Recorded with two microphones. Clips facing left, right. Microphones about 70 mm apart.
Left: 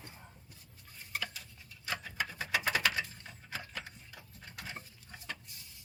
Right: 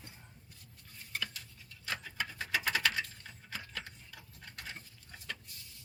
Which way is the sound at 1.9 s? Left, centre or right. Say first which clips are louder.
Left 2 dB; centre.